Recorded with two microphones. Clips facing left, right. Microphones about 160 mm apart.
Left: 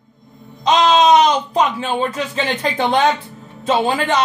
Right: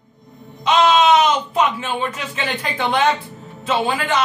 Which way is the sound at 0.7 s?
40° left (ahead or behind).